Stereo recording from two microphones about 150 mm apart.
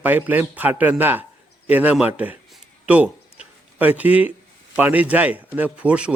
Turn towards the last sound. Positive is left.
turn(degrees=-10)  # may be behind; listen again after turning